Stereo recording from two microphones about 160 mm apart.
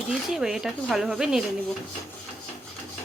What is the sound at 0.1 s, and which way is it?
Speech, 5° right (ahead or behind).